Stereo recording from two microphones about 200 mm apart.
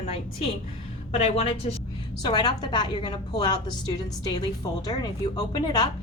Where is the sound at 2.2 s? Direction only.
20° left (ahead or behind).